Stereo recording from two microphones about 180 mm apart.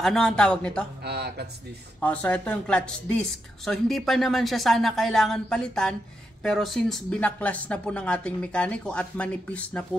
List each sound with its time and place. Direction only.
0.0 s speech: centre (ahead or behind)
1.0 s speech: 65° right (ahead or behind)
2.0 s speech: 10° left (ahead or behind)